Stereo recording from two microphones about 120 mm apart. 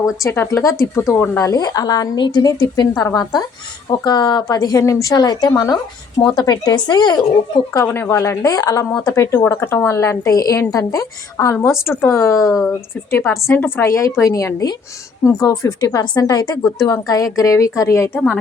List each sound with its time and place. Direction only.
0.2 s speech: 25° left (ahead or behind)
7.9 s speech: 20° left (ahead or behind)